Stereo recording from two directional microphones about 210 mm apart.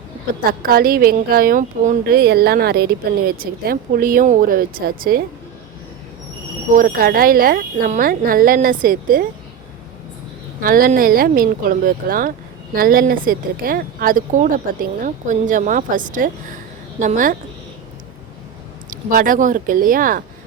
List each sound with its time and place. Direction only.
0.6 s speech: 45° right (ahead or behind)
6.7 s speech: 45° right (ahead or behind)
10.6 s speech: 40° right (ahead or behind)
18.9 s speech: 40° right (ahead or behind)